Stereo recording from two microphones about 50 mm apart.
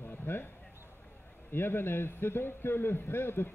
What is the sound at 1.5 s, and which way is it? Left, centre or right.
Speech, left.